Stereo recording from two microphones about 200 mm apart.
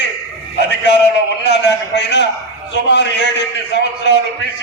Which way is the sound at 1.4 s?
60° left (ahead or behind).